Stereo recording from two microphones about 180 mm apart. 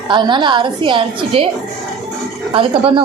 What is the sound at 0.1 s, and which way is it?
A woman's voice, 25° right (ahead or behind).